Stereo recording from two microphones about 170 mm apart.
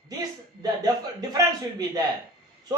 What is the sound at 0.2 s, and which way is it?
Speech, 20° right (ahead or behind).